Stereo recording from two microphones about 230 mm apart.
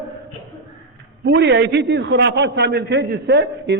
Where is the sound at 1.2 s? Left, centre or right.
Right.